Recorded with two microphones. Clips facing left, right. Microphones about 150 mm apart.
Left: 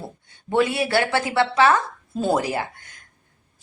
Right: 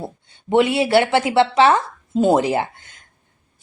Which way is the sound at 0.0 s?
20° right (ahead or behind).